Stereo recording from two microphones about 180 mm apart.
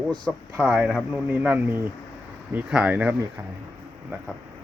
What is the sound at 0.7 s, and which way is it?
Speech, 5° right (ahead or behind).